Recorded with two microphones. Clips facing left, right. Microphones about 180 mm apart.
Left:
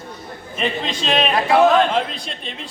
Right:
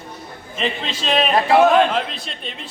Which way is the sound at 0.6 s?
Centre (ahead or behind).